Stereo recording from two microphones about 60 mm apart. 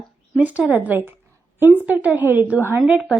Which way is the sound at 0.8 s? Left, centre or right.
Right.